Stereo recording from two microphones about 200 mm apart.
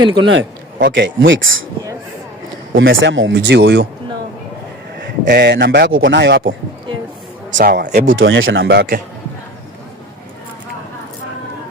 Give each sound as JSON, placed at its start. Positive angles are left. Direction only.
{"t": 0.0, "sound": "a man's voice", "side_deg": -20}
{"t": 0.8, "sound": "a man's voice", "side_deg": -55}
{"t": 2.9, "sound": "a man's voice", "side_deg": -70}
{"t": 5.2, "sound": "a man's voice", "side_deg": -55}
{"t": 7.5, "sound": "speech", "side_deg": -45}
{"t": 8.1, "sound": "speech", "side_deg": -75}